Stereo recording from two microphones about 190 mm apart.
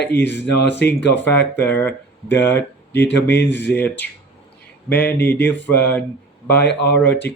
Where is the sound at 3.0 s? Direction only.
65° left (ahead or behind).